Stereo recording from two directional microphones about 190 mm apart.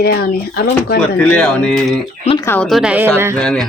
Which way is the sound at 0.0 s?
55° left (ahead or behind).